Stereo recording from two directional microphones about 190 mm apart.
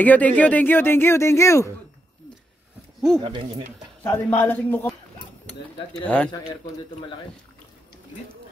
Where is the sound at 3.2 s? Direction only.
30° right (ahead or behind).